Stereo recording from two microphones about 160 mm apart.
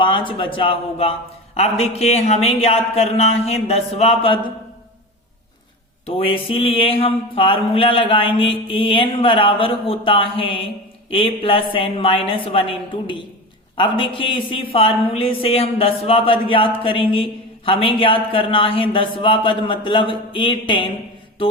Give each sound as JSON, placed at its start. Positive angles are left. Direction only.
{"t": 0.0, "sound": "mantra", "side_deg": 30}
{"t": 6.1, "sound": "mantra", "side_deg": 35}